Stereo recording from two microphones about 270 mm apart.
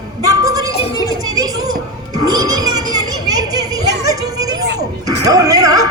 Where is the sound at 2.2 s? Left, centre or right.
Centre.